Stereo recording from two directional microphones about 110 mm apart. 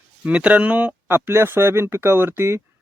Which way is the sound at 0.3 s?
10° right (ahead or behind).